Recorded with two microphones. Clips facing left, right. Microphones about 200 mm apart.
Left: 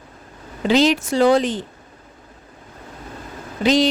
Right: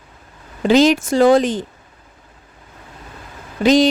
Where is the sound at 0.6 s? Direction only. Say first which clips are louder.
Right 4 dB; 45° right (ahead or behind).